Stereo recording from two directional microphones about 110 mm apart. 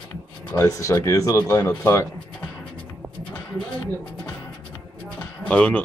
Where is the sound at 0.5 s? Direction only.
25° left (ahead or behind).